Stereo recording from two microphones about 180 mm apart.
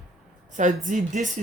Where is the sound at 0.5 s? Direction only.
45° right (ahead or behind).